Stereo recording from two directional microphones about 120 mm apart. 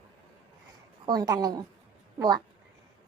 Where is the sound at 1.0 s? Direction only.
30° right (ahead or behind).